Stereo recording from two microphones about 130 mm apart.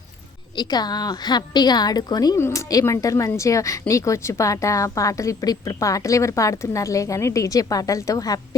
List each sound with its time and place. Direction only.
0.5 s a woman's voice: 35° left (ahead or behind)